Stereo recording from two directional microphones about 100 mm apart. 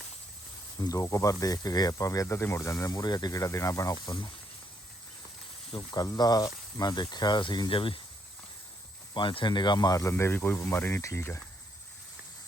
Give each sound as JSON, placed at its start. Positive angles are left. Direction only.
{"t": 0.8, "sound": "speech", "side_deg": 35}
{"t": 4.0, "sound": "speech", "side_deg": 45}
{"t": 5.7, "sound": "speech", "side_deg": 45}
{"t": 9.1, "sound": "speech", "side_deg": 55}